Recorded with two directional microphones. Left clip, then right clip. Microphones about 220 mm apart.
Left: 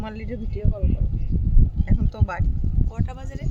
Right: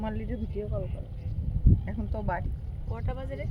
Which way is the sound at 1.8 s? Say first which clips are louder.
Left 4 dB; 30° left (ahead or behind).